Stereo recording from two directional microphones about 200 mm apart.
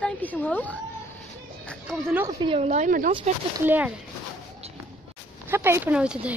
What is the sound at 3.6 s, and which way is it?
Speech, 10° right (ahead or behind).